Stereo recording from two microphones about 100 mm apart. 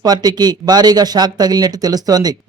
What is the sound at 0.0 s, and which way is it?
Speech, 40° right (ahead or behind).